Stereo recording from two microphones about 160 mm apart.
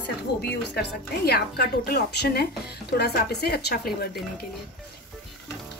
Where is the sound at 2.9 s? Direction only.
90° left.